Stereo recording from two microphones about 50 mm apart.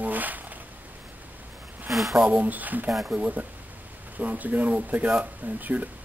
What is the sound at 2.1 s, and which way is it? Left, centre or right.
Speech, right.